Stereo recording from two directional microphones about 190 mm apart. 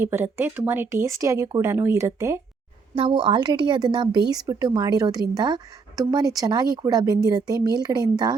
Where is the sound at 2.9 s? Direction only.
25° right (ahead or behind).